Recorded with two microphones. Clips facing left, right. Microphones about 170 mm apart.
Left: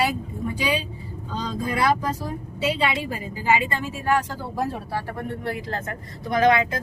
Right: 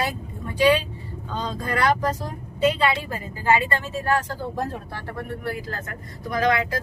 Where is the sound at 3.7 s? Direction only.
15° left (ahead or behind).